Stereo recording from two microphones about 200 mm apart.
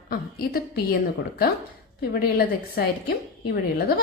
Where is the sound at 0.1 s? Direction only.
45° left (ahead or behind).